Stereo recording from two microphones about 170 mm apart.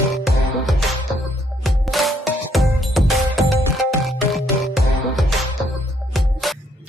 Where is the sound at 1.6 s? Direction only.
Centre (ahead or behind).